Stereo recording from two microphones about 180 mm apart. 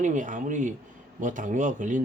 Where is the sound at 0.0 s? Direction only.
45° right (ahead or behind).